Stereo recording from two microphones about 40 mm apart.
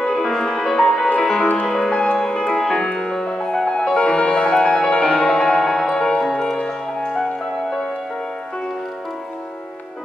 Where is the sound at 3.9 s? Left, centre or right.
Left; by 5.9 s centre.